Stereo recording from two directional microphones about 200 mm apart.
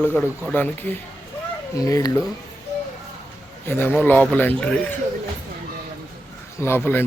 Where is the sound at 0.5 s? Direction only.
10° left (ahead or behind).